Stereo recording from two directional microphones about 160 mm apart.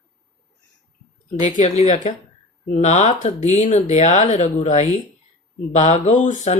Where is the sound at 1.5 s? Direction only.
45° left (ahead or behind).